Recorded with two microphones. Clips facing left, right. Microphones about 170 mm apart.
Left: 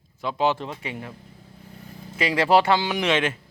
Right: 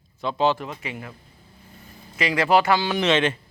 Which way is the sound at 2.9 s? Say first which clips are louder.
Right 2 dB; 10° left (ahead or behind).